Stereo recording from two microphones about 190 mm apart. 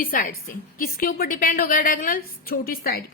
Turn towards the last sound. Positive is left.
turn(degrees=50)  # may be behind; listen again after turning